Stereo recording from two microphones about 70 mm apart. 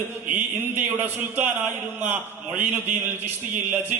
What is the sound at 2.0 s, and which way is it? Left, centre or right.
A man's voice, right.